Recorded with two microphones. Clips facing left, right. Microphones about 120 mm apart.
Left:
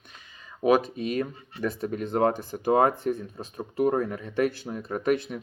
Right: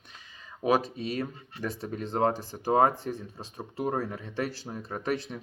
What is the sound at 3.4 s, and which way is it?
Speech, 35° right (ahead or behind).